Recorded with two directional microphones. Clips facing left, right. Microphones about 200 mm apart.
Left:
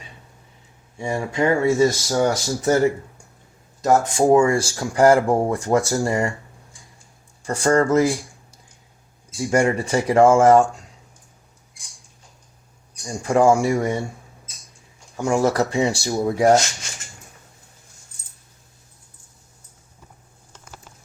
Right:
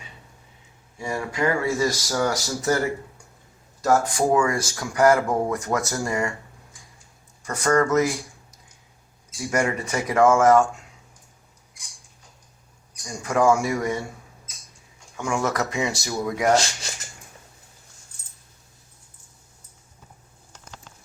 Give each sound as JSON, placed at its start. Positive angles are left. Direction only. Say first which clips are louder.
{"t": 0.9, "sound": "speech", "louder": "left 4 dB", "side_deg": 25}
{"t": 7.4, "sound": "speech", "louder": "left 3 dB", "side_deg": 30}
{"t": 9.5, "sound": "speech", "louder": "left 5 dB", "side_deg": 30}
{"t": 13.1, "sound": "speech", "louder": "left 4 dB", "side_deg": 30}
{"t": 15.1, "sound": "speech", "louder": "left 6 dB", "side_deg": 35}